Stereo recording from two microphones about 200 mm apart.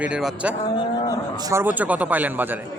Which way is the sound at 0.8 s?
20° left (ahead or behind).